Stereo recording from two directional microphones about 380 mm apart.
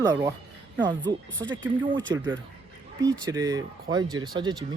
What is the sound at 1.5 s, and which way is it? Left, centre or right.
Speech, right.